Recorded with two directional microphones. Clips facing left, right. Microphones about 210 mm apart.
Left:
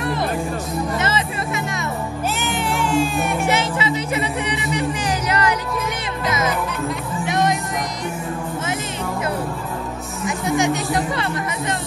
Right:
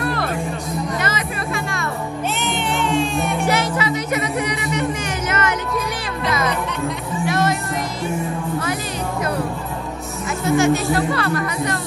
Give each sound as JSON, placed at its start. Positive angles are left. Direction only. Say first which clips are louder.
{"t": 0.0, "sound": "music", "louder": "even", "side_deg": 20}
{"t": 2.4, "sound": "music", "louder": "right 1 dB", "side_deg": 0}
{"t": 3.4, "sound": "speech", "louder": "right 1 dB", "side_deg": 25}
{"t": 7.2, "sound": "music", "louder": "even", "side_deg": 15}
{"t": 10.4, "sound": "speech", "louder": "right 4 dB", "side_deg": 15}